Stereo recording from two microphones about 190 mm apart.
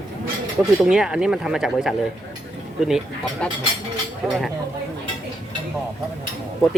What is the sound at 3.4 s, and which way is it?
Speech, 5° left (ahead or behind).